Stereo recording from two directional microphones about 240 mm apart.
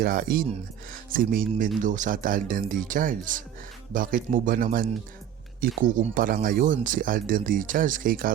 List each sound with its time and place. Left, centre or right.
0.0 s speech: right